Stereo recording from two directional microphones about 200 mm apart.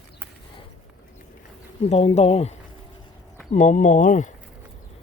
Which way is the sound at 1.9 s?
30° left (ahead or behind).